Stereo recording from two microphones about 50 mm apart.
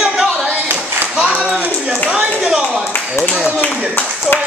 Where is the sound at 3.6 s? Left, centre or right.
Left.